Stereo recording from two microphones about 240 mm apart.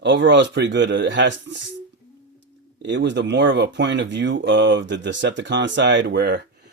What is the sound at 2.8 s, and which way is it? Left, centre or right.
Speech, right.